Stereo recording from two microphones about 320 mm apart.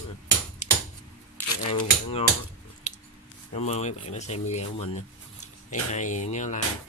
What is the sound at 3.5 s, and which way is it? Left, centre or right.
Speech, centre.